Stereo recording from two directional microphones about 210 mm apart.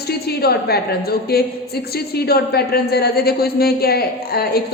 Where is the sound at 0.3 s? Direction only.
50° left (ahead or behind).